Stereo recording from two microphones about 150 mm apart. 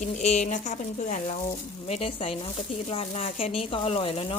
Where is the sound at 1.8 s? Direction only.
40° left (ahead or behind).